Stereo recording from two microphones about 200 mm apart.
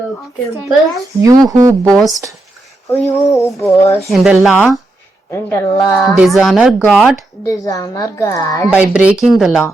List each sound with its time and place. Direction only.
1.2 s speech: 15° right (ahead or behind)
1.9 s speech: centre (ahead or behind)
2.9 s a woman's voice: 15° left (ahead or behind)
4.0 s speech: centre (ahead or behind)
5.3 s a woman's voice: 10° left (ahead or behind)
6.0 s speech: centre (ahead or behind)
7.4 s a woman's voice: 15° left (ahead or behind)
8.7 s speech: 5° right (ahead or behind)